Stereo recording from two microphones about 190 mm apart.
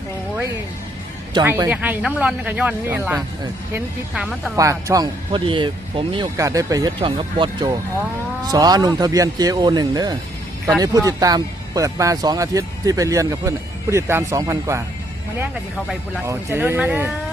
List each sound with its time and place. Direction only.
1.5 s a man's voice: 10° right (ahead or behind)
4.5 s a man's voice: 15° right (ahead or behind)
16.2 s a man's voice: 15° right (ahead or behind)